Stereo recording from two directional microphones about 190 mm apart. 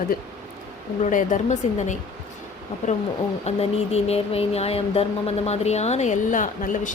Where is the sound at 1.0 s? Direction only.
40° left (ahead or behind).